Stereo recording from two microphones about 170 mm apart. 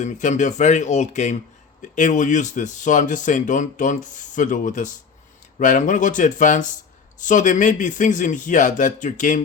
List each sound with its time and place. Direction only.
0.0 s speech: 45° left (ahead or behind)